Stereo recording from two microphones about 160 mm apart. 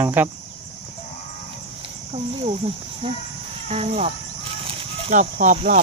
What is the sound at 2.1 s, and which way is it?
Speech, 40° right (ahead or behind).